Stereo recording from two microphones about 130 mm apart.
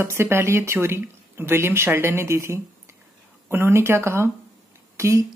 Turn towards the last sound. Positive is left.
turn(degrees=-20)  # may be behind; listen again after turning